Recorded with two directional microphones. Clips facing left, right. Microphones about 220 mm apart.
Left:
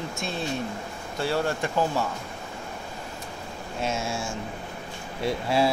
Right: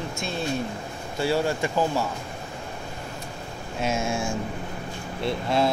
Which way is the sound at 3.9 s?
15° right (ahead or behind).